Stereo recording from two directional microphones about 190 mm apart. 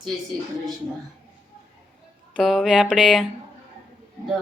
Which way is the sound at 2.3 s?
Centre (ahead or behind).